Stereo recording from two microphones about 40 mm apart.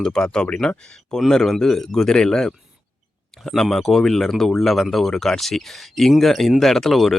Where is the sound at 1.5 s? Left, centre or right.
Centre.